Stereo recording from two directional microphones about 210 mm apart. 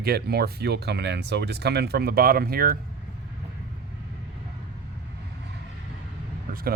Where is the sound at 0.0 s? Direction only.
50° right (ahead or behind).